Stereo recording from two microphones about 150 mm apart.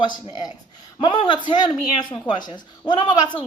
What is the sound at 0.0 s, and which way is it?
A woman's voice, 30° left (ahead or behind).